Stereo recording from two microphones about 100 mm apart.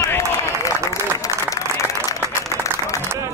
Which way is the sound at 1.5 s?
35° left (ahead or behind).